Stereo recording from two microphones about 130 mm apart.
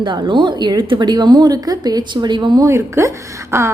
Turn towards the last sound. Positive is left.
turn(degrees=-20)  # may be behind; listen again after turning